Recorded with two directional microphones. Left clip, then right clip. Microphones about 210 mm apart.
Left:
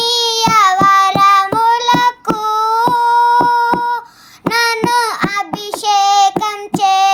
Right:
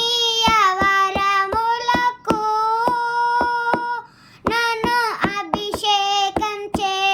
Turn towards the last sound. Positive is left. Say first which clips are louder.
# left 8 dB
turn(degrees=-15)  # may be behind; listen again after turning